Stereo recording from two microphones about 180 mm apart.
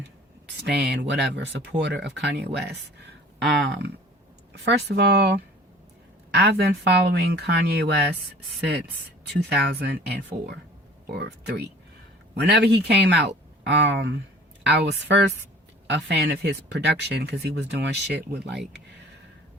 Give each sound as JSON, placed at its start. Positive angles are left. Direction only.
{"t": 0.4, "sound": "speech", "side_deg": -70}
{"t": 4.6, "sound": "speech", "side_deg": -70}
{"t": 9.2, "sound": "speech", "side_deg": -65}